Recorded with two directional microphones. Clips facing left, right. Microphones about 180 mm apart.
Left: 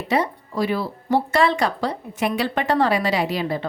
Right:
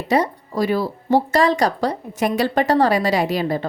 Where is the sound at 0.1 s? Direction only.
40° right (ahead or behind).